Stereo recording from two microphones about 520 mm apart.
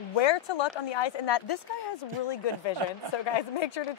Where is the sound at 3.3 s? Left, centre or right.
Left.